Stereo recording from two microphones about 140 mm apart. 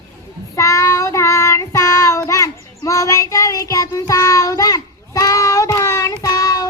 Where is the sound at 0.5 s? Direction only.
20° left (ahead or behind).